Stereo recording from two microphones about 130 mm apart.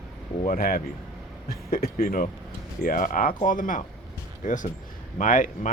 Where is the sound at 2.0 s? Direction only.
90° left.